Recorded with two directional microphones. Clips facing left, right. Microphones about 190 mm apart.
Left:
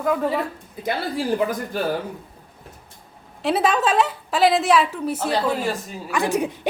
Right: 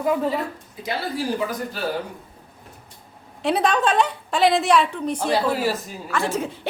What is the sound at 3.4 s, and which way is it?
A woman's voice, centre (ahead or behind).